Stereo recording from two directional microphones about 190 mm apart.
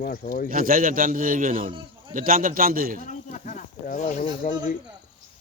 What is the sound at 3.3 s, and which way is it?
Speech, 40° left (ahead or behind).